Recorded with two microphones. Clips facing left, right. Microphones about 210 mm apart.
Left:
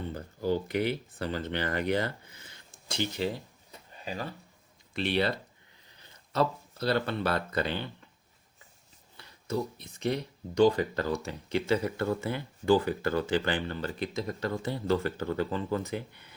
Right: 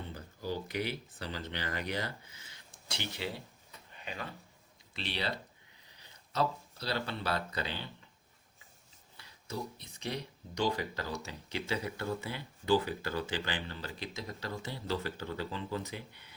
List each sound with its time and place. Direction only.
0.1 s speech: 55° left (ahead or behind)
3.7 s a sound: 35° left (ahead or behind)
4.9 s speech: 55° left (ahead or behind)
9.1 s speech: 55° left (ahead or behind)